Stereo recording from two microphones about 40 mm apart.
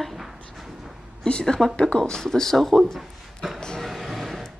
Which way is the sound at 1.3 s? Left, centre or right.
Left.